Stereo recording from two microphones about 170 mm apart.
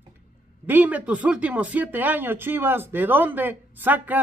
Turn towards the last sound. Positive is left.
turn(degrees=-10)  # may be behind; listen again after turning